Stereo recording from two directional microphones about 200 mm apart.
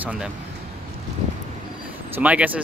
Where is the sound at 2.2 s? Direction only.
5° right (ahead or behind).